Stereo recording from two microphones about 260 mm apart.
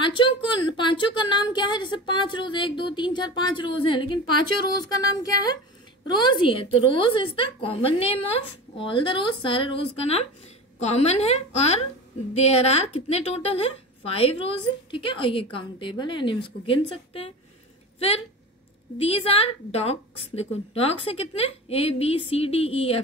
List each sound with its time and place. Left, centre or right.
0.0 s a woman's voice: centre
18.9 s a woman's voice: left